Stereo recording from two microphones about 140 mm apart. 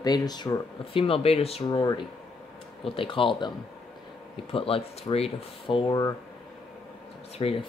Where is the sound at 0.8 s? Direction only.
40° left (ahead or behind).